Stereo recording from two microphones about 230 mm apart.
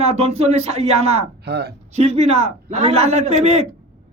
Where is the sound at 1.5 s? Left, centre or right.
Right.